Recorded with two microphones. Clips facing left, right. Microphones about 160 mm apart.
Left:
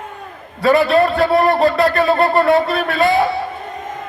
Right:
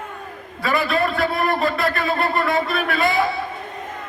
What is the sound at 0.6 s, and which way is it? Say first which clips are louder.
A man's voice: left 8 dB; 35° left (ahead or behind).